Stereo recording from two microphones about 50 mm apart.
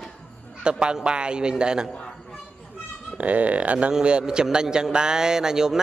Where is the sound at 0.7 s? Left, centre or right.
Centre.